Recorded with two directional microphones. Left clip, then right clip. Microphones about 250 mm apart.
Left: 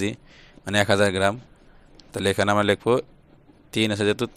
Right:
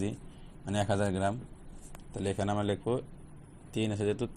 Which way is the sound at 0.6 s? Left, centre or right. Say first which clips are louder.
Left 12 dB; left.